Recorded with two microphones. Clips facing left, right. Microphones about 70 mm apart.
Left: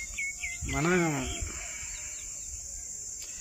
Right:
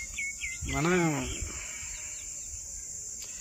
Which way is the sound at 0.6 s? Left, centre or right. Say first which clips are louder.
Even; centre.